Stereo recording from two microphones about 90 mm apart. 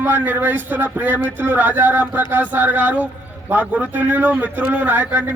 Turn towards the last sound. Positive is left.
turn(degrees=-15)  # may be behind; listen again after turning